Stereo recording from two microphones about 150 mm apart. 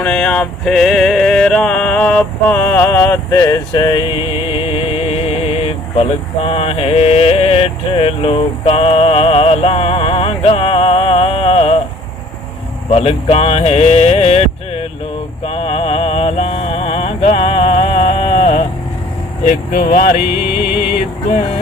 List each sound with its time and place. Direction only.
0.0 s a sound: 10° left (ahead or behind); by 4.1 s 25° left (ahead or behind)
4.5 s speech: 35° left (ahead or behind)
12.9 s music: 40° left (ahead or behind)
18.3 s sheep: 65° left (ahead or behind)
19.5 s speech: 65° left (ahead or behind)